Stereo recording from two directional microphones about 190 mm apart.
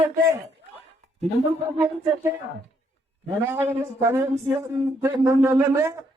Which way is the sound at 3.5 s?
15° right (ahead or behind).